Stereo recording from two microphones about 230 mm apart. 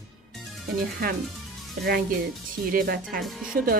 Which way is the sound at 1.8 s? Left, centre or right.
Right.